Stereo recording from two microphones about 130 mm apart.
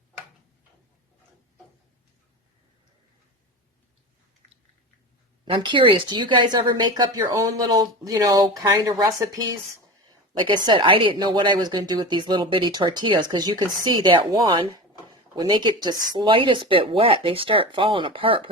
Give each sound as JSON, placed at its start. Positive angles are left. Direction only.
{"t": 5.5, "sound": "a woman's voice", "side_deg": -40}